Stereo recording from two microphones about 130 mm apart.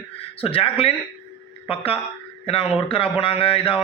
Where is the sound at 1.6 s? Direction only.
45° left (ahead or behind).